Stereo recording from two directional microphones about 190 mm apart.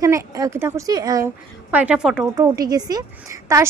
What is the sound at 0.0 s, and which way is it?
A woman's voice, 15° right (ahead or behind).